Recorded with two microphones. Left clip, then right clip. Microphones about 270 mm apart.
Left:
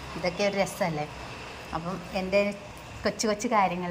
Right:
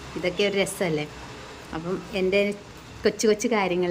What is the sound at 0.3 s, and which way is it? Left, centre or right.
A woman's voice, centre.